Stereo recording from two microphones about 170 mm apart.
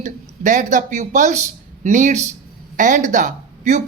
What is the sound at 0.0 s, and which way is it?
Speech, 50° right (ahead or behind).